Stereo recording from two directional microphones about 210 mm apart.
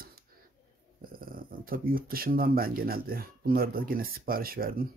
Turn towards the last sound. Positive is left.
turn(degrees=-45)  # may be behind; listen again after turning